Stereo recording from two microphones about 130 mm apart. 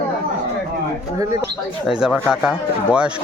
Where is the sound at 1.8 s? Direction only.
5° right (ahead or behind).